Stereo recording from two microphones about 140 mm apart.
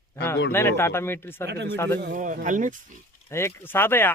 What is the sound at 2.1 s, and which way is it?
Speech, 70° right (ahead or behind).